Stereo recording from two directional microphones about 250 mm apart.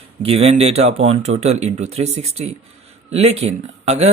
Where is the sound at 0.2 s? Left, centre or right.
Right.